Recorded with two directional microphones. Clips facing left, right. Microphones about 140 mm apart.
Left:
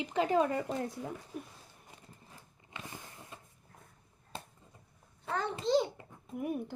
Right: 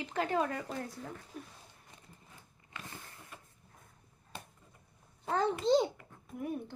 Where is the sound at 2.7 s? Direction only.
20° left (ahead or behind).